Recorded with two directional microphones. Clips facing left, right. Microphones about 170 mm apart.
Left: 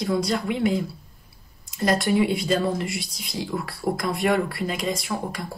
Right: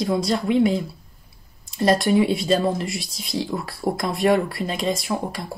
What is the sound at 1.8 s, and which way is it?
Speech, 25° right (ahead or behind).